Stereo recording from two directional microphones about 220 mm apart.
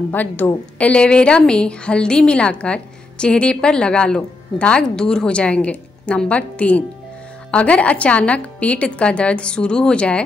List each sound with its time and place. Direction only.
0.1 s a woman's voice: 10° left (ahead or behind)